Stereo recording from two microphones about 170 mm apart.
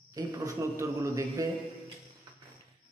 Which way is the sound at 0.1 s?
25° right (ahead or behind).